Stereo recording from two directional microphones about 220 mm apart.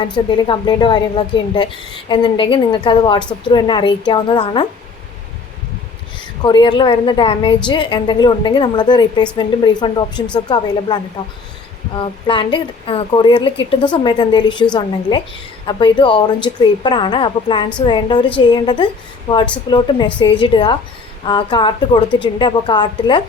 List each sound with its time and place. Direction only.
0.0 s speech: 20° left (ahead or behind)
6.4 s speech: 20° left (ahead or behind)